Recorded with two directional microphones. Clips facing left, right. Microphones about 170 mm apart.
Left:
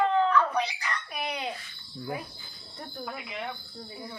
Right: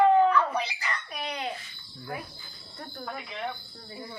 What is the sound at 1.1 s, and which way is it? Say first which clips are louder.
Babbling: left 2 dB; 10° left (ahead or behind).